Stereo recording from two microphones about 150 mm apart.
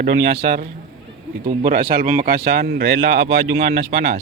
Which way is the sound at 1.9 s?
65° right (ahead or behind).